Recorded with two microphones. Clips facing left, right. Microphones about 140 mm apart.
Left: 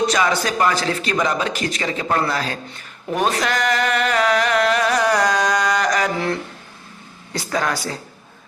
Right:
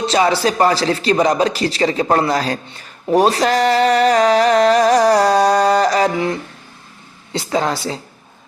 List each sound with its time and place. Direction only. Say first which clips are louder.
0.0 s music: right 4 dB; 30° right (ahead or behind)
7.3 s speech: right 4 dB; 25° right (ahead or behind)